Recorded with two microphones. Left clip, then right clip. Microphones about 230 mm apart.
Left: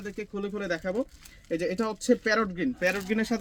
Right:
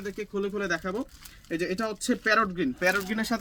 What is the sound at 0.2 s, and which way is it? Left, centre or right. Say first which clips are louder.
Speech: right 3 dB; centre.